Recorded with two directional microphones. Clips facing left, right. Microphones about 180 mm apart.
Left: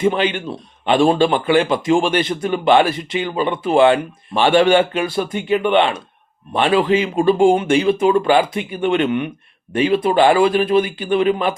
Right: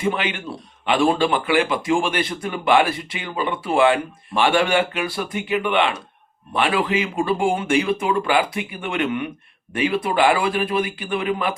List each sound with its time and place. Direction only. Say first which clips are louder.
0.0 s a man's voice: left 6 dB; 25° left (ahead or behind)